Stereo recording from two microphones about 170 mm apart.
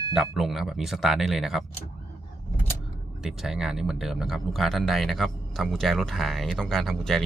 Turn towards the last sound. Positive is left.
turn(degrees=0)  # may be behind; listen again after turning